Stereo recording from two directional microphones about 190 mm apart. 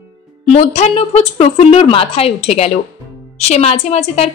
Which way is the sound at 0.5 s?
35° left (ahead or behind).